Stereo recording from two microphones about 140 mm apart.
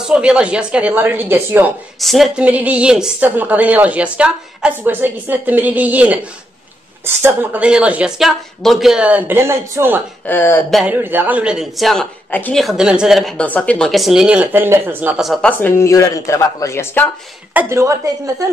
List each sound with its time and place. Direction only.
0.0 s a woman's voice: 5° right (ahead or behind)
2.0 s a woman's voice: centre (ahead or behind); by 10.0 s 15° right (ahead or behind)
10.2 s speech: 15° left (ahead or behind)
10.9 s a woman's voice: 15° right (ahead or behind)
12.3 s speech: 15° left (ahead or behind)
12.5 s speech: centre (ahead or behind)
13.4 s speech: 10° left (ahead or behind)
15.5 s speech: 15° left (ahead or behind)
17.6 s a woman's voice: 20° right (ahead or behind)